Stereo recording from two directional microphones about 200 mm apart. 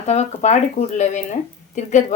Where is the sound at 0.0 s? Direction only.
35° left (ahead or behind).